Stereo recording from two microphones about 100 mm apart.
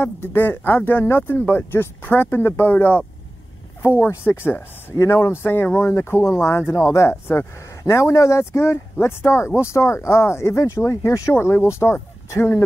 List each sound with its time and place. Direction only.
0.0 s speech: 25° left (ahead or behind)